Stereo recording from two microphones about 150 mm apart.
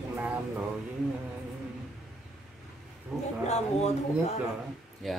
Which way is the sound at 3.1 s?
Centre (ahead or behind).